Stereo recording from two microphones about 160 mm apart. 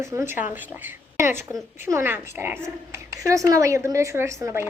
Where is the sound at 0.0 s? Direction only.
15° right (ahead or behind).